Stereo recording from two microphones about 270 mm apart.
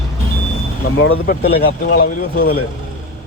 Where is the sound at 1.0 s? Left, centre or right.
Left.